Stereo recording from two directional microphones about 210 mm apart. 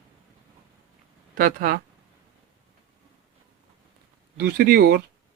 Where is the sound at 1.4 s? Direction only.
45° right (ahead or behind).